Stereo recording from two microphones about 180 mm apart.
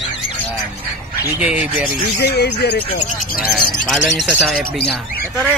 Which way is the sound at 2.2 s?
65° left (ahead or behind).